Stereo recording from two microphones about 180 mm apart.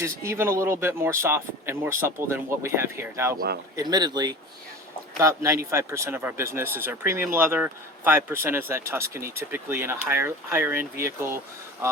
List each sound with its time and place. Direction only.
0.3 s speech: 15° right (ahead or behind)